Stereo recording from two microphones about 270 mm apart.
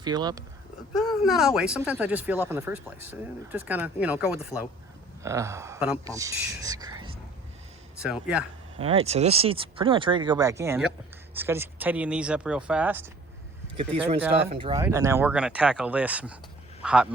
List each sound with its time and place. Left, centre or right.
0.0 s speech: centre
0.9 s speech: centre
8.0 s speech: centre
8.8 s speech: right
13.7 s speech: right; by 17.2 s centre